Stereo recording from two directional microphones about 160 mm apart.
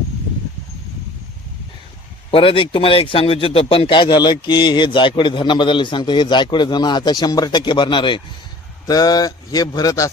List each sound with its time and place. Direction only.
2.3 s a man's voice: 35° left (ahead or behind)